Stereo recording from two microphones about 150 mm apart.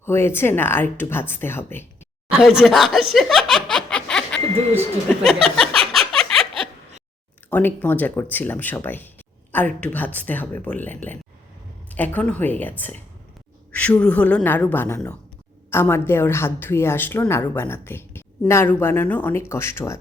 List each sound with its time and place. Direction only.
0.0 s a woman's voice: 15° left (ahead or behind)
2.6 s speech: centre (ahead or behind)
5.0 s a sound: centre (ahead or behind)
7.5 s a woman's voice: 10° left (ahead or behind)